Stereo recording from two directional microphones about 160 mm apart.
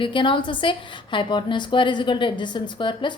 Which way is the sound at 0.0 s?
30° left (ahead or behind).